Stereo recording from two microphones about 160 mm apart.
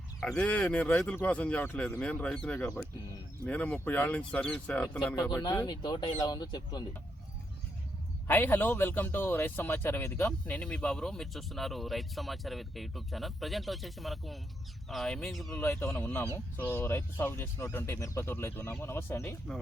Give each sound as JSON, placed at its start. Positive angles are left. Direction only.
{"t": 0.2, "sound": "speech", "side_deg": 5}
{"t": 5.3, "sound": "speech", "side_deg": 25}
{"t": 8.3, "sound": "speech", "side_deg": 15}
{"t": 15.6, "sound": "speech", "side_deg": 15}